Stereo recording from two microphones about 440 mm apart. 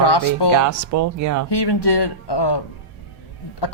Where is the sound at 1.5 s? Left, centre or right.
Left.